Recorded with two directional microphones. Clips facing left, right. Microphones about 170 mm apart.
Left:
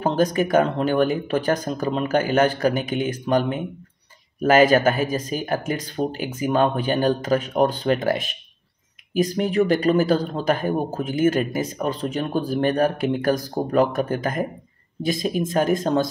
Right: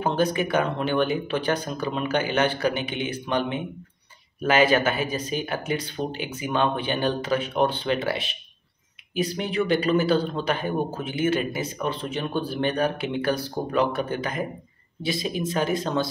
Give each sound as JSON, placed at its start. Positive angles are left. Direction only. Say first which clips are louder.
{"t": 0.0, "sound": "speech", "louder": "left 3 dB", "side_deg": 40}